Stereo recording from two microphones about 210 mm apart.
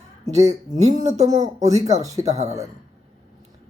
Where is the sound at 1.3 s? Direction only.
35° right (ahead or behind).